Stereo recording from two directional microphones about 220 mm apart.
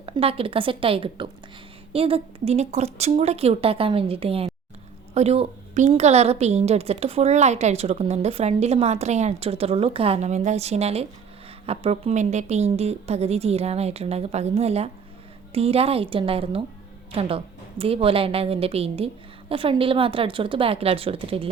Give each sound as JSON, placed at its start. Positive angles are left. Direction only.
{"t": 0.0, "sound": "a woman's voice", "side_deg": -25}